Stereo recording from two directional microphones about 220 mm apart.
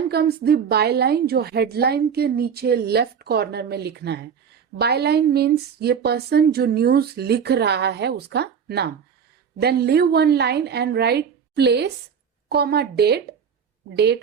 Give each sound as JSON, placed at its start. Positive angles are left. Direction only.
{"t": 0.1, "sound": "speech", "side_deg": -45}